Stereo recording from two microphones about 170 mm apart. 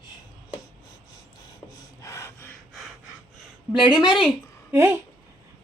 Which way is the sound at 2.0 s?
15° left (ahead or behind).